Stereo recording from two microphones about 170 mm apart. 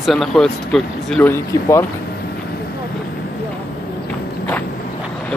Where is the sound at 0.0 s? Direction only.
Centre (ahead or behind).